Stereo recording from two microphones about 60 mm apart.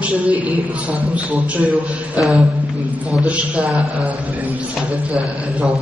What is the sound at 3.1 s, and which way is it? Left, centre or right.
A man's voice, centre.